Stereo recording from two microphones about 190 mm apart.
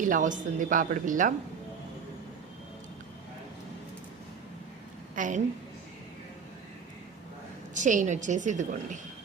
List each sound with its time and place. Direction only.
0.0 s speech: 45° right (ahead or behind)
5.1 s a woman's voice: 40° right (ahead or behind)
7.7 s a woman's voice: 40° right (ahead or behind)